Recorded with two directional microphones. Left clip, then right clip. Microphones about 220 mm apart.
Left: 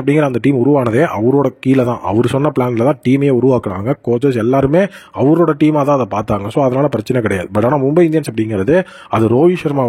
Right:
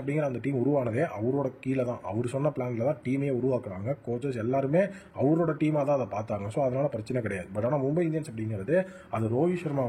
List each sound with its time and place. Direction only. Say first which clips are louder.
0.0 s speech: left 17 dB; 55° left (ahead or behind)